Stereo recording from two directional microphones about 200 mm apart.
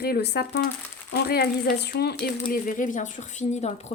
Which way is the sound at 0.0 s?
55° left (ahead or behind).